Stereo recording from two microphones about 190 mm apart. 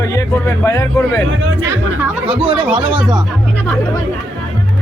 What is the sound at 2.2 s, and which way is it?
Speech, 30° right (ahead or behind).